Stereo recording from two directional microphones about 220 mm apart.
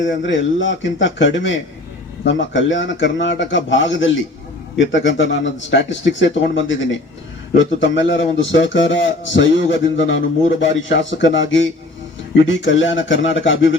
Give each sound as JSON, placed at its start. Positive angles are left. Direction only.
{"t": 0.0, "sound": "a man's voice", "side_deg": 55}